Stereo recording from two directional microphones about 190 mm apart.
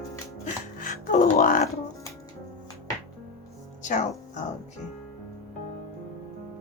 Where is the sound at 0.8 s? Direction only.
45° left (ahead or behind).